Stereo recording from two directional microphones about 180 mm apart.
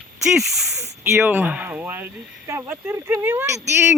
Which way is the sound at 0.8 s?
15° right (ahead or behind).